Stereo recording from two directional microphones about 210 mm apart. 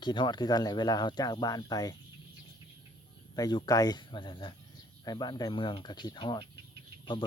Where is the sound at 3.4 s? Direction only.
20° left (ahead or behind).